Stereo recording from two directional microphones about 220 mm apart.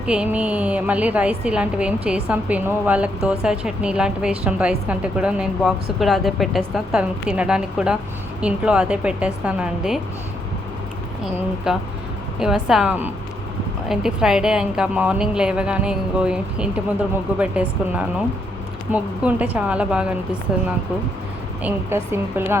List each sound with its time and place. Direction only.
0.0 s a woman's voice: 5° right (ahead or behind)
11.7 s a woman's voice: 5° right (ahead or behind)
21.6 s a woman's voice: 10° right (ahead or behind)